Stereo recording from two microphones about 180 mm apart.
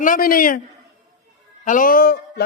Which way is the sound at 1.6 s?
50° left (ahead or behind).